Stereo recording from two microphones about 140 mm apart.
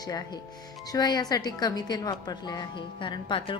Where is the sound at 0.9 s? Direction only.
30° left (ahead or behind).